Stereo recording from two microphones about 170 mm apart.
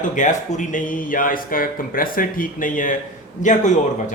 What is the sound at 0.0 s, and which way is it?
A man's voice, 45° left (ahead or behind).